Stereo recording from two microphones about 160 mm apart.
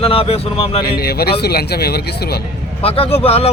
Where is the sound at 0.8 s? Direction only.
80° left.